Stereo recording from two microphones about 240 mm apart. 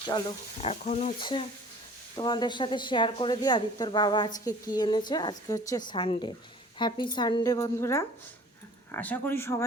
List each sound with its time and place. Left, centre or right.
0.6 s a woman's voice: left; by 9.6 s centre